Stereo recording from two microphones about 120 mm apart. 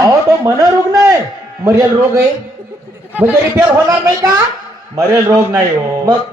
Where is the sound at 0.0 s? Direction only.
30° right (ahead or behind).